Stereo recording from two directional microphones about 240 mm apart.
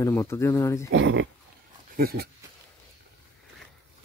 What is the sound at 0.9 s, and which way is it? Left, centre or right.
Speech, right.